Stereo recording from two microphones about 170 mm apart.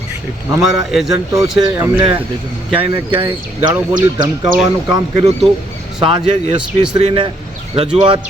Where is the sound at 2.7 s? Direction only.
35° right (ahead or behind).